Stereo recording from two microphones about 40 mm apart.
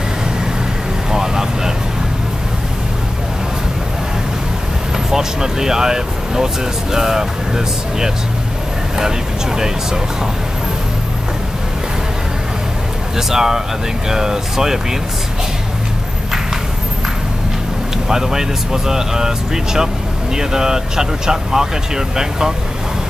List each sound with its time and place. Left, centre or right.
1.1 s vehicle: centre
5.1 s speech: centre
13.3 s speech: centre
18.0 s speech: centre